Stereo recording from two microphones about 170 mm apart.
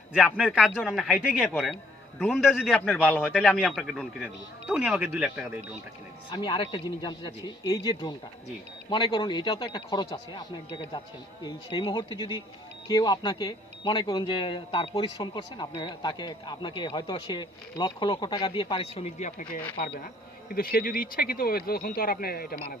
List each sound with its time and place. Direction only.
0.3 s a man's voice: 5° right (ahead or behind)
2.3 s a man's voice: centre (ahead or behind)
6.3 s speech: 30° left (ahead or behind)
19.8 s speech: 55° left (ahead or behind)